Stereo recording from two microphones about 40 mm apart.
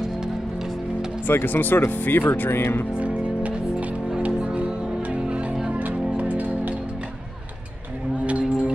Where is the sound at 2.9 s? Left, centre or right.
Right.